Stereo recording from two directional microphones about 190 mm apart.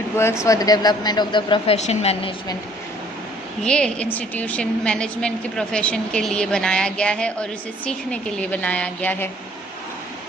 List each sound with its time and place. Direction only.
0.2 s speech: 15° left (ahead or behind); by 2.3 s 35° left (ahead or behind)
3.6 s a woman's voice: 5° left (ahead or behind)